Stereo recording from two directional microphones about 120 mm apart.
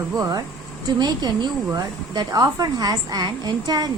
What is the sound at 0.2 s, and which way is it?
A woman's voice, 30° right (ahead or behind).